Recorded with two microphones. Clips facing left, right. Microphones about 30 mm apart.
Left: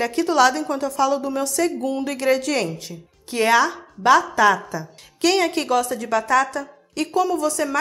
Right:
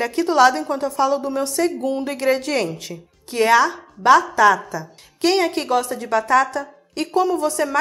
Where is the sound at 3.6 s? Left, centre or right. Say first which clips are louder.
Right 2 dB; right.